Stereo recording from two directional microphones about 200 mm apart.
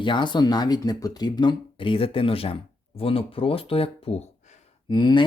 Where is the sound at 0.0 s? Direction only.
25° left (ahead or behind).